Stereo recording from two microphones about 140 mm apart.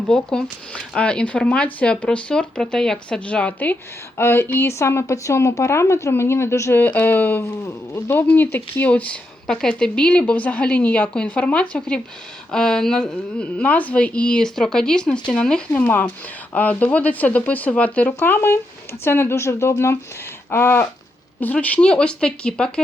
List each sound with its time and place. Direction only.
0.1 s speech: 5° left (ahead or behind)